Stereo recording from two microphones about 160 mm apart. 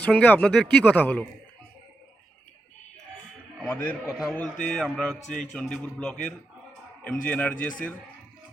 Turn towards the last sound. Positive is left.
turn(degrees=10)  # may be behind; listen again after turning